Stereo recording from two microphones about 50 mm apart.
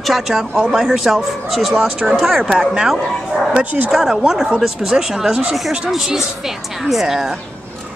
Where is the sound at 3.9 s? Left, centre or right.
Centre.